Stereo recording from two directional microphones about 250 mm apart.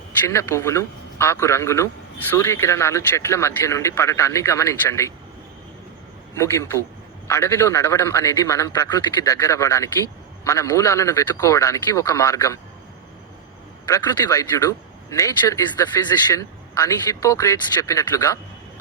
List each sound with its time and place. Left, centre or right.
0.3 s a man's voice: centre
6.3 s a man's voice: centre
13.8 s a man's voice: centre